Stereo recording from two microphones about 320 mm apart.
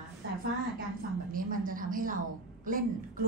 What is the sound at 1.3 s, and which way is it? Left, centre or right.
A woman's voice, right.